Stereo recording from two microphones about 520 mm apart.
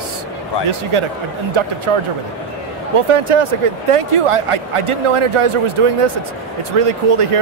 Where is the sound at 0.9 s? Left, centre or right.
Right.